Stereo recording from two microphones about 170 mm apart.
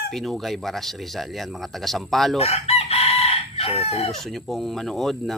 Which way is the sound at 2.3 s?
35° left (ahead or behind).